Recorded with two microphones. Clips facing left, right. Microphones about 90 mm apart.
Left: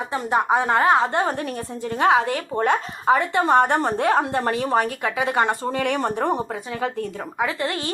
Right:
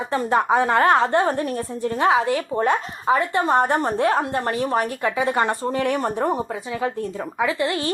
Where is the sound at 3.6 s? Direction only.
20° left (ahead or behind).